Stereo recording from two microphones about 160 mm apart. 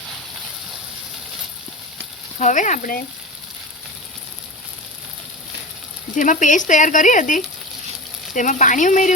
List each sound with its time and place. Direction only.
2.4 s speech: 50° left (ahead or behind)
6.1 s speech: 50° left (ahead or behind)